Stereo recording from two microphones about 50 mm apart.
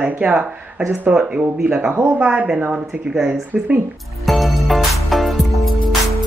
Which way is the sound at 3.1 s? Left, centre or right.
Centre.